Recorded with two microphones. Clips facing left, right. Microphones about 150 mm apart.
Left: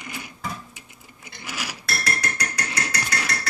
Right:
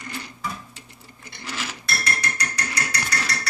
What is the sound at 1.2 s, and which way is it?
Mechanisms, 10° left (ahead or behind).